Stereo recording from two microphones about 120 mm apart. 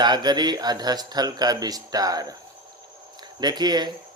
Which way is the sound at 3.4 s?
35° right (ahead or behind).